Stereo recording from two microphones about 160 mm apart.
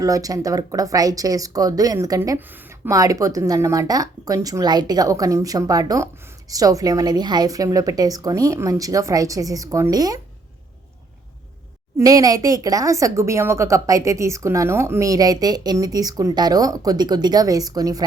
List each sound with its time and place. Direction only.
0.0 s a woman's voice: 20° right (ahead or behind)
11.9 s a woman's voice: 20° right (ahead or behind)